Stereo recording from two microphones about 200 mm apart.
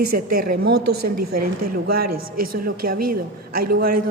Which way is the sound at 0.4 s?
50° right (ahead or behind).